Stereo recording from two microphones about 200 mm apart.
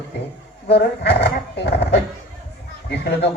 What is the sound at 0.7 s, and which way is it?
Speech, 55° left (ahead or behind).